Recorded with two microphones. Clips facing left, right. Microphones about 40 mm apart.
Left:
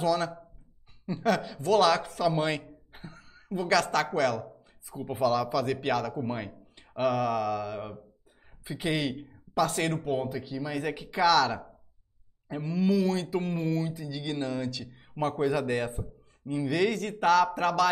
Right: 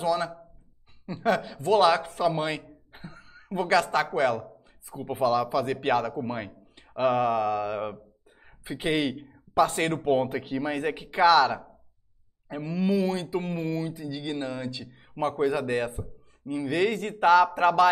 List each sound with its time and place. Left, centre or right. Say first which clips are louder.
0.0 s speech: right 1 dB; centre
3.4 s a man's voice: right 2 dB; right
6.1 s speech: right 1 dB; centre
7.0 s a man's voice: right 3 dB; right
9.1 s speech: even; centre
9.5 s a man's voice: right 4 dB; right
10.2 s speech: right 5 dB; right
10.8 s a man's voice: right 3 dB; right